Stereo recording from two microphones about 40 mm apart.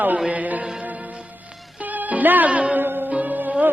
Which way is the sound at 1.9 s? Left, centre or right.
Right.